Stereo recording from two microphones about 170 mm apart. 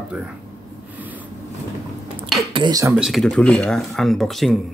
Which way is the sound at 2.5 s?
25° right (ahead or behind).